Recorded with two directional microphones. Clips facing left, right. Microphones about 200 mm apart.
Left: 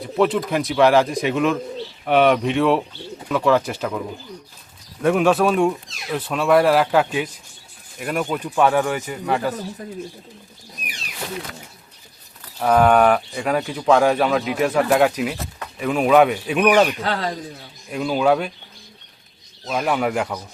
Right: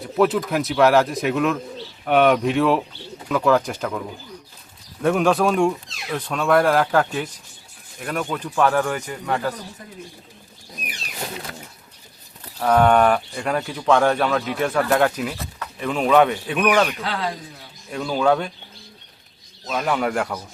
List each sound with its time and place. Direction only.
0.0 s speech: centre (ahead or behind)
5.0 s speech: centre (ahead or behind)
12.5 s speech: 5° left (ahead or behind)
17.0 s speech: 40° left (ahead or behind)
17.9 s speech: 10° left (ahead or behind)
19.6 s speech: 10° left (ahead or behind)